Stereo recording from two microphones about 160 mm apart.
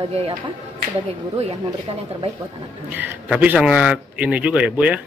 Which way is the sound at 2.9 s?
10° right (ahead or behind).